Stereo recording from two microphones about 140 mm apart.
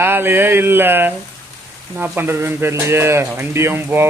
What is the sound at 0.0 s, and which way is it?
Speech, 15° right (ahead or behind).